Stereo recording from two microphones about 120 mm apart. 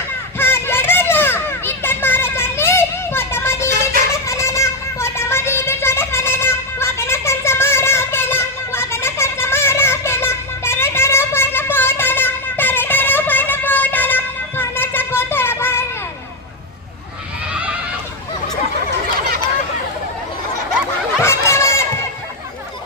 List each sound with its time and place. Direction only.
0.3 s children playing: 20° left (ahead or behind)
4.3 s a sound: 25° left (ahead or behind)
21.2 s chicken: 20° left (ahead or behind)